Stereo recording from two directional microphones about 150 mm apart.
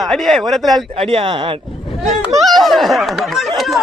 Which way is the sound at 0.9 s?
35° right (ahead or behind).